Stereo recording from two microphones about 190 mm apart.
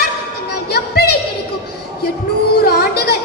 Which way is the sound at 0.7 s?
55° left (ahead or behind).